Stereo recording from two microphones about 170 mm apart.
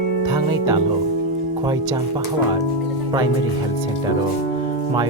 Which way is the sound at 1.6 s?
20° right (ahead or behind).